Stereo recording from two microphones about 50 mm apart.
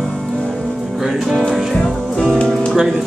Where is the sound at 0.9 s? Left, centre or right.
Centre.